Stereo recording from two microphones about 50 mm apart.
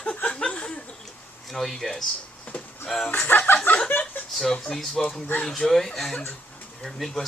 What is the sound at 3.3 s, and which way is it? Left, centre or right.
Speech, left.